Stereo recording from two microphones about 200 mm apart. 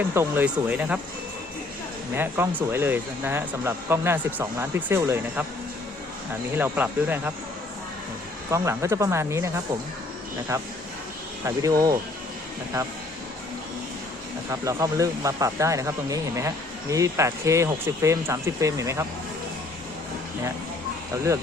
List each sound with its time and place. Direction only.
0.1 s speech: 10° right (ahead or behind)
2.1 s speech: 10° right (ahead or behind)
6.6 s speech: 10° right (ahead or behind)
8.4 s speech: 15° right (ahead or behind)
10.5 s speech: 15° right (ahead or behind)
14.5 s speech: 15° right (ahead or behind)